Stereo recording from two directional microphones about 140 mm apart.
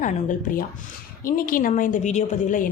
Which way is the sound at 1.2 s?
90° left.